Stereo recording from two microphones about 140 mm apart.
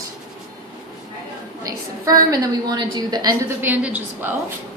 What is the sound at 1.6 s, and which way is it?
A woman's voice, 25° right (ahead or behind).